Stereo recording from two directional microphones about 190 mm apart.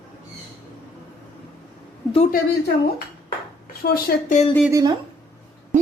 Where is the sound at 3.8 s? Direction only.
50° left (ahead or behind).